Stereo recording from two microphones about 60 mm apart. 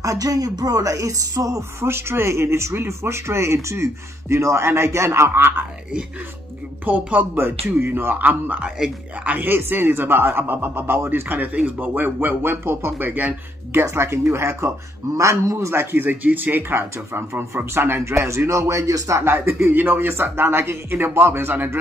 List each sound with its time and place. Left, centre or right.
0.0 s a woman's voice: right
1.8 s speech: right
6.9 s speech: right
7.4 s speech: right
8.6 s speech: centre
9.4 s speech: right
13.8 s speech: right
16.7 s speech: right